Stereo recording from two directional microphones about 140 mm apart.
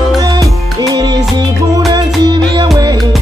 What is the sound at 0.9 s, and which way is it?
Music, 30° right (ahead or behind).